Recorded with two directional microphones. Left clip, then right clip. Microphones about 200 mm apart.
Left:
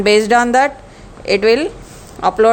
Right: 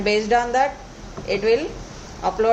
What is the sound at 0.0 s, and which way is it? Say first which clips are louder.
A woman's voice: left 8 dB; 50° left (ahead or behind).